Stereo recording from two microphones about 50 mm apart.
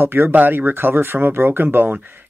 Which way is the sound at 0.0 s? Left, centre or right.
Right.